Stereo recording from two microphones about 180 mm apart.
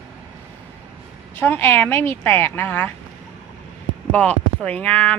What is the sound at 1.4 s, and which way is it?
Speech, 10° left (ahead or behind).